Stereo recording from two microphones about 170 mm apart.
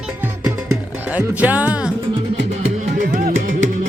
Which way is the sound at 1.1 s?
10° right (ahead or behind).